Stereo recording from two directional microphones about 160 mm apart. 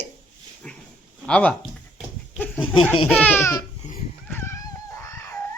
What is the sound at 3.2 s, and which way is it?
Speech, 10° left (ahead or behind).